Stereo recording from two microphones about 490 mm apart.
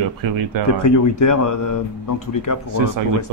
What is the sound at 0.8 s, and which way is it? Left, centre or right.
Speech, left.